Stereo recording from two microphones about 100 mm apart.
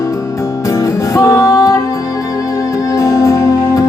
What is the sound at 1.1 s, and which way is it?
Music, 30° left (ahead or behind).